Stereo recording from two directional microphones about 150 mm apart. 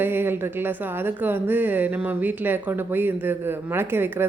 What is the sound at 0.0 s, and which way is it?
A woman's voice, 15° right (ahead or behind).